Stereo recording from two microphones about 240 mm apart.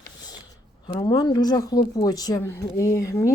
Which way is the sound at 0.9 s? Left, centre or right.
Centre.